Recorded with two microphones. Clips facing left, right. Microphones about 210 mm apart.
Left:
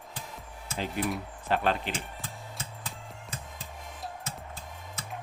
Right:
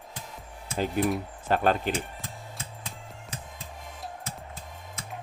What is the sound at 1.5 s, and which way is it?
Speech, 45° right (ahead or behind).